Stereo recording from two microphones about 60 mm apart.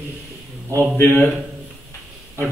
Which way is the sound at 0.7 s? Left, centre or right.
Left.